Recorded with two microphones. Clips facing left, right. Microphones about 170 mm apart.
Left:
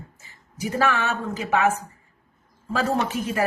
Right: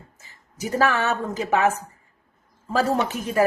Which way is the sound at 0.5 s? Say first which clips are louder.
Right 1 dB; 40° right (ahead or behind).